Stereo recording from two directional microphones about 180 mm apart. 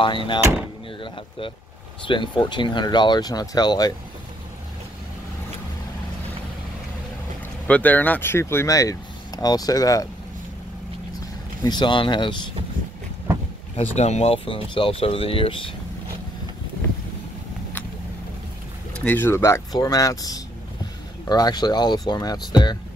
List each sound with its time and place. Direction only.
0.4 s speech: 15° right (ahead or behind)
2.0 s speech: 25° left (ahead or behind)
7.6 s speech: 10° left (ahead or behind)
11.1 s speech: 25° left (ahead or behind)
13.7 s speech: 35° left (ahead or behind)
18.9 s speech: 10° left (ahead or behind)